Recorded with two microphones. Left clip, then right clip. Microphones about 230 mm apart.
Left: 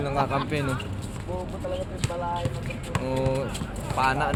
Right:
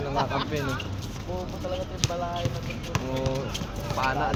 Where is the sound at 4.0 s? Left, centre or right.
Left.